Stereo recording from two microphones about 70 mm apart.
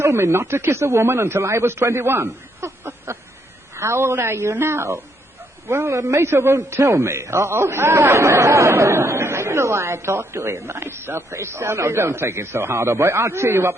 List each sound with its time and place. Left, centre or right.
0.0 s a man's voice: right